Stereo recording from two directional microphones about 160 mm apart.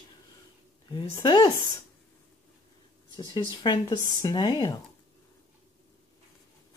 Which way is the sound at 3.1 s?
30° left (ahead or behind).